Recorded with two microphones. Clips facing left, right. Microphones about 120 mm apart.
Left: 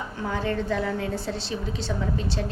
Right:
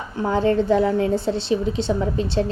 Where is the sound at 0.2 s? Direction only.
30° right (ahead or behind).